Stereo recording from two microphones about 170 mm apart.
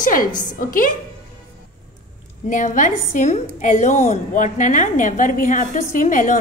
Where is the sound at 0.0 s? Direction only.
55° left (ahead or behind).